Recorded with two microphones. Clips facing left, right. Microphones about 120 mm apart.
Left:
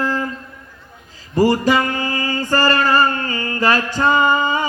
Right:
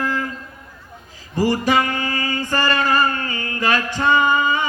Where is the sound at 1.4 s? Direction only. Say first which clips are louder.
Left 3 dB; 30° left (ahead or behind).